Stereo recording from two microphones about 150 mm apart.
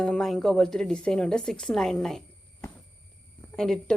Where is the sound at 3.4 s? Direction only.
5° left (ahead or behind).